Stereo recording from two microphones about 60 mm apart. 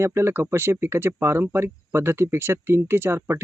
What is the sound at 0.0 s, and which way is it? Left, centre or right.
Speech, right.